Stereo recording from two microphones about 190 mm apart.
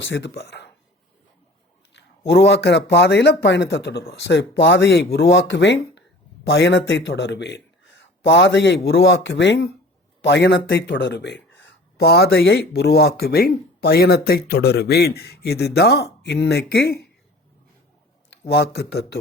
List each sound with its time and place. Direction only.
0.0 s speech: 70° left (ahead or behind)
1.9 s a man's voice: 65° left (ahead or behind)
9.0 s a man's voice: 80° left; by 17.1 s 60° left (ahead or behind)
18.3 s speech: 60° left (ahead or behind)